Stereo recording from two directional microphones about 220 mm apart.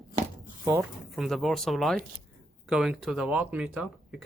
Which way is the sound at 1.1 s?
Centre (ahead or behind).